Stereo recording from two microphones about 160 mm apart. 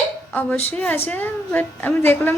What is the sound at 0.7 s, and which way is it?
A woman's voice, 10° left (ahead or behind).